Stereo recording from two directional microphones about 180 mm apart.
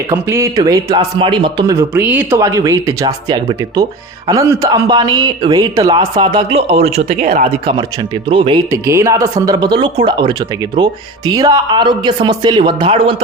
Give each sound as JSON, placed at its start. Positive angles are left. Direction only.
{"t": 0.1, "sound": "a man's voice", "side_deg": -15}
{"t": 7.3, "sound": "speech", "side_deg": -55}
{"t": 8.3, "sound": "a man's voice", "side_deg": -30}
{"t": 8.7, "sound": "a man's voice", "side_deg": -15}